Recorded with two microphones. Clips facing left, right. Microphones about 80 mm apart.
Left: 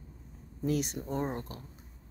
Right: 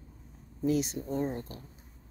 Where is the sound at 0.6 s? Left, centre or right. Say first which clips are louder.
Right 3 dB; left.